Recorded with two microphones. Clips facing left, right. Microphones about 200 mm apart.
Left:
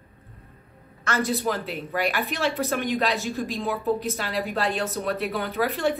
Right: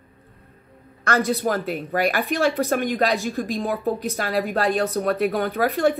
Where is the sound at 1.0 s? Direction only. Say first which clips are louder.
Right 4 dB; 45° right (ahead or behind).